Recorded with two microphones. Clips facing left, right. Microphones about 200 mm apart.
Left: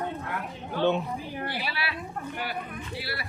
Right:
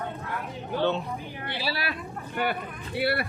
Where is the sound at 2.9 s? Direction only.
60° right (ahead or behind).